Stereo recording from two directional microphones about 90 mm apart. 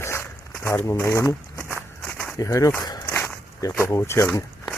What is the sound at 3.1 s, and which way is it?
Walk, 25° left (ahead or behind).